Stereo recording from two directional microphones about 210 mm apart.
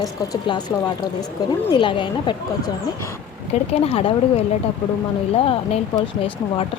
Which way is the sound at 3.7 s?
25° left (ahead or behind).